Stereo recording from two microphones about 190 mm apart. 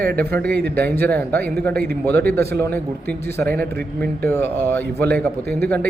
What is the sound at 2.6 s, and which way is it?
Speech, 10° left (ahead or behind).